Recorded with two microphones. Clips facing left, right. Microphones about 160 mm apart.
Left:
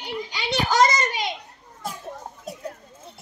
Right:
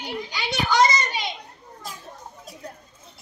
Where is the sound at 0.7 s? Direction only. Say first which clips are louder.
Even; 45° left (ahead or behind).